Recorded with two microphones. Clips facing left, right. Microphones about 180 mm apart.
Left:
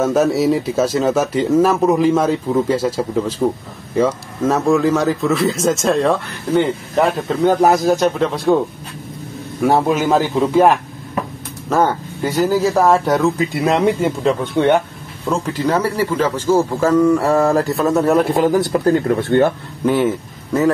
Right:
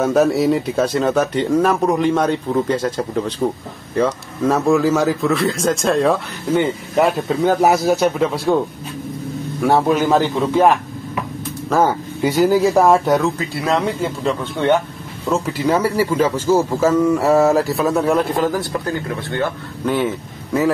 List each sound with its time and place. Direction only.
0.0 s speech: centre (ahead or behind)
9.6 s speech: centre (ahead or behind)
11.7 s speech: 5° right (ahead or behind)
13.7 s speech: 20° left (ahead or behind)
15.2 s speech: 10° right (ahead or behind)
18.5 s speech: 20° left (ahead or behind)
19.8 s speech: 10° left (ahead or behind)